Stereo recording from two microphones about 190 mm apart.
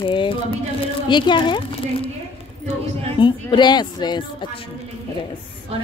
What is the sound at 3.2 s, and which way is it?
Speech, 25° left (ahead or behind).